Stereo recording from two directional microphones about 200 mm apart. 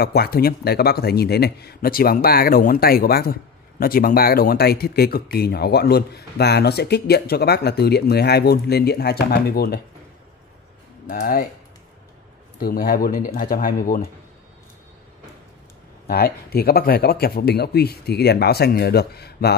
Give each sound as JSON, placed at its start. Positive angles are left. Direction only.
{"t": 0.0, "sound": "speech", "side_deg": 50}
{"t": 11.1, "sound": "speech", "side_deg": 45}
{"t": 12.5, "sound": "speech", "side_deg": 50}
{"t": 16.1, "sound": "speech", "side_deg": 50}